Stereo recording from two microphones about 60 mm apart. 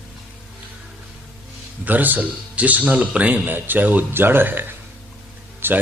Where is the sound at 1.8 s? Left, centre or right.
Right.